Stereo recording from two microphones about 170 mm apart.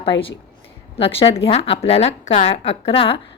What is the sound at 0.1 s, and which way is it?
Speech, 90° left.